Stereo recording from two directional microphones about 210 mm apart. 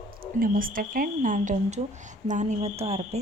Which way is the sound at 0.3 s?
40° right (ahead or behind).